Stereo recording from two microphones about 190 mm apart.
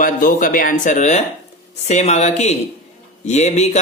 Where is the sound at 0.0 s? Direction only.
45° left (ahead or behind).